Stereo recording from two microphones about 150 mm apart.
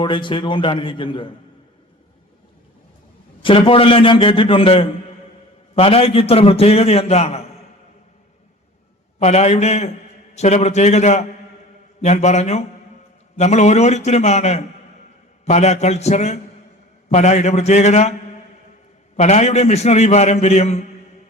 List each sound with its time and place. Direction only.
0.0 s a man's voice: 30° left (ahead or behind)
3.4 s a man's voice: 35° left (ahead or behind)
9.1 s a man's voice: 50° left (ahead or behind)
19.1 s a man's voice: 50° left (ahead or behind)